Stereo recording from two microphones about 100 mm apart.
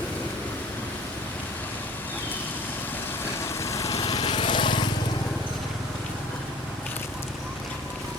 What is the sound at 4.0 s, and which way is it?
Lawn mower, 45° left (ahead or behind).